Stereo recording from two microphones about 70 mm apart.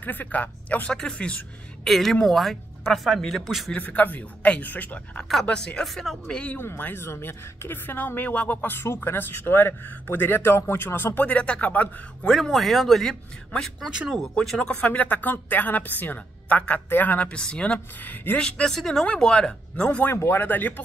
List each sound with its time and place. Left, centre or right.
0.0 s a woman's voice: left
1.9 s speech: centre
3.7 s a woman's voice: left
5.3 s speech: centre
6.6 s a woman's voice: left
12.3 s speech: centre
13.8 s speech: centre
14.4 s speech: centre
14.7 s a woman's voice: centre
18.0 s a woman's voice: left
18.4 s speech: centre
20.1 s a woman's voice: left
20.4 s a woman's voice: left